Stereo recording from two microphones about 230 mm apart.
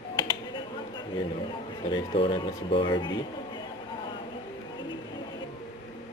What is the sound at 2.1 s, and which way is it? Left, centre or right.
Speech, left.